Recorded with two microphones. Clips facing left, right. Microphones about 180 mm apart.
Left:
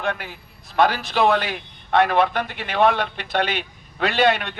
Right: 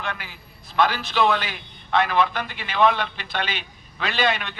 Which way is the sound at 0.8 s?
55° left (ahead or behind).